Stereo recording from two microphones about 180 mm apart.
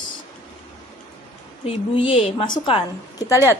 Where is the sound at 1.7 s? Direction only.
30° left (ahead or behind).